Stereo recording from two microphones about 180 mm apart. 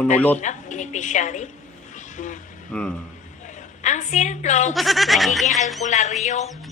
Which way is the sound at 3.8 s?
40° left (ahead or behind).